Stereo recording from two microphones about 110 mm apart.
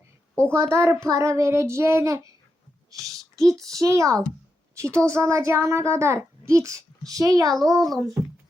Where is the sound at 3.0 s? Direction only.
30° right (ahead or behind).